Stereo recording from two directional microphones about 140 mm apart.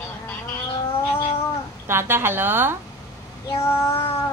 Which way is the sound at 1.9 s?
15° right (ahead or behind).